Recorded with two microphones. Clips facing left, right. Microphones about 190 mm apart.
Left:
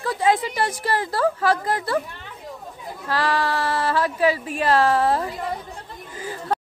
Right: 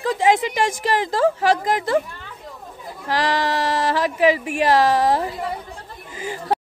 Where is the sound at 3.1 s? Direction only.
15° right (ahead or behind).